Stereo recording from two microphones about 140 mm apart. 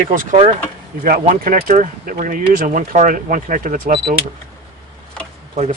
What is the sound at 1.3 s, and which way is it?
Speech, 85° right.